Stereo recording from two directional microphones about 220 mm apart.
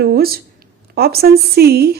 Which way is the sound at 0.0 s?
45° right (ahead or behind).